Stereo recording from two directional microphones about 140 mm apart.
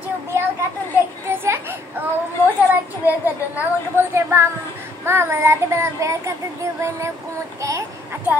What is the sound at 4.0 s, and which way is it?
Child singing, 15° right (ahead or behind).